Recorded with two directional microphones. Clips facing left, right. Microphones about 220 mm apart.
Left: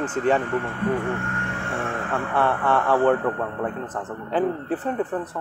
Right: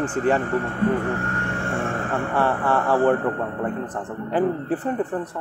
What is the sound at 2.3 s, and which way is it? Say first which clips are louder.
Speech: even; 10° right (ahead or behind).